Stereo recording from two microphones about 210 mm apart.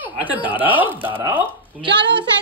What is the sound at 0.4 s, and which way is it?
Speech, 25° left (ahead or behind).